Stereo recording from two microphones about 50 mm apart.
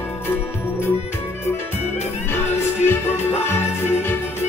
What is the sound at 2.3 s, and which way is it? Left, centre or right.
Music, left.